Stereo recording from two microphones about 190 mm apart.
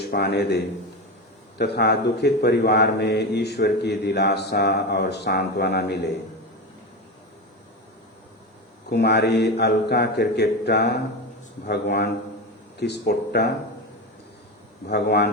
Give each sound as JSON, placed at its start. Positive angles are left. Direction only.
{"t": 0.0, "sound": "speech", "side_deg": 60}
{"t": 8.9, "sound": "speech", "side_deg": 60}
{"t": 14.8, "sound": "speech", "side_deg": 60}